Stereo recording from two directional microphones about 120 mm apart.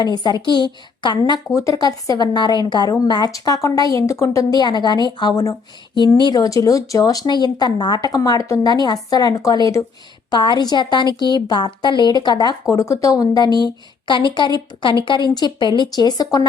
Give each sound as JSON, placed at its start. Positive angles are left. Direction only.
{"t": 0.0, "sound": "speech", "side_deg": 35}
{"t": 1.5, "sound": "speech", "side_deg": 25}
{"t": 10.3, "sound": "speech", "side_deg": 40}